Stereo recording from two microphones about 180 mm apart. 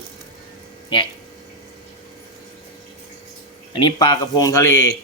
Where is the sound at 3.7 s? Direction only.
25° left (ahead or behind).